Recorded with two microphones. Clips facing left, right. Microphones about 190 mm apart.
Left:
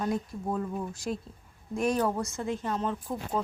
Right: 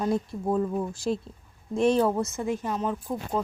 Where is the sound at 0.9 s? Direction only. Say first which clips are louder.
Right 5 dB; 30° right (ahead or behind).